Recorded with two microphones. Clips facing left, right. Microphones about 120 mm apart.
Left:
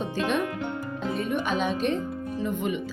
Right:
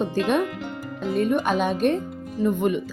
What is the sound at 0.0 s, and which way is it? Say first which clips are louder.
A woman's voice: right 4 dB; 45° right (ahead or behind).